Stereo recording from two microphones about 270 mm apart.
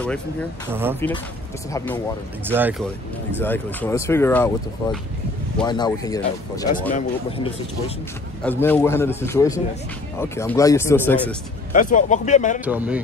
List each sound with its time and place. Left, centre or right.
0.0 s a man's voice: centre
2.4 s speech: centre
3.4 s a man's voice: centre
5.7 s a man's voice: centre
8.5 s a man's voice: centre
11.7 s speech: left
12.6 s speech: centre